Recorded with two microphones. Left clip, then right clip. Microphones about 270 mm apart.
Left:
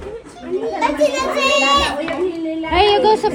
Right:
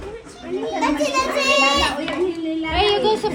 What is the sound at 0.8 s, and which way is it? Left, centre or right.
Speech, centre.